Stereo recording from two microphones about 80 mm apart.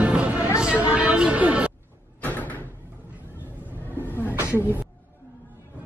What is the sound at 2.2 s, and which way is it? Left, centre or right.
Door, left.